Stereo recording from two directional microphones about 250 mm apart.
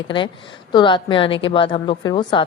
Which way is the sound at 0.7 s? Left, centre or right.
Centre.